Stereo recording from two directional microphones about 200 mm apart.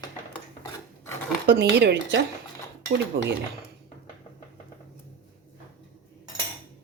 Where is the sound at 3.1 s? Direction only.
65° right (ahead or behind).